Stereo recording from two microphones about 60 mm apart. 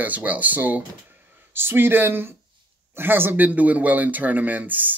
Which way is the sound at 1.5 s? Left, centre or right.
Right.